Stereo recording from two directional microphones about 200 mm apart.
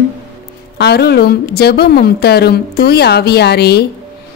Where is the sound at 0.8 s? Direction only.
55° left (ahead or behind).